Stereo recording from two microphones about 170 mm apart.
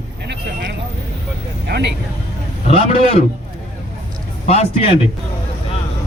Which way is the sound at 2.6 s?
35° left (ahead or behind).